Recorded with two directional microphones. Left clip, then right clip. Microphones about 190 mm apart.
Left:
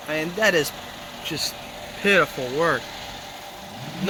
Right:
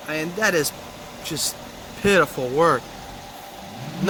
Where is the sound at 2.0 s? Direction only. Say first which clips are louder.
Right 1 dB; 5° right (ahead or behind).